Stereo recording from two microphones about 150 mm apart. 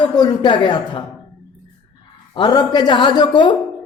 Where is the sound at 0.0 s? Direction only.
30° left (ahead or behind).